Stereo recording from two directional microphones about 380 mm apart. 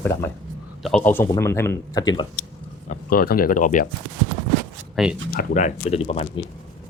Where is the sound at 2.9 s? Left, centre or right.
Left.